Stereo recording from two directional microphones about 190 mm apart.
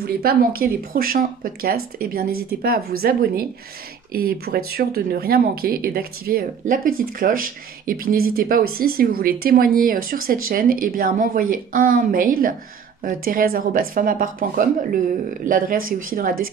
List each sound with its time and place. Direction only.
0.0 s speech: 55° right (ahead or behind)